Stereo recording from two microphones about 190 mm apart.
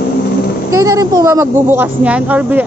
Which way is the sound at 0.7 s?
15° right (ahead or behind).